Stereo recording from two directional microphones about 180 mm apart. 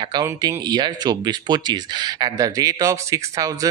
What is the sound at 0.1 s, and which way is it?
Speech, 20° right (ahead or behind).